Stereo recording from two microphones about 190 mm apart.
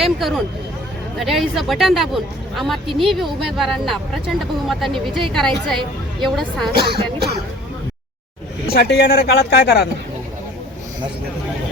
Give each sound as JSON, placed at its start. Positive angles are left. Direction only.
{"t": 0.0, "sound": "speech", "side_deg": 0}
{"t": 6.7, "sound": "speech", "side_deg": -55}
{"t": 8.6, "sound": "speech", "side_deg": 60}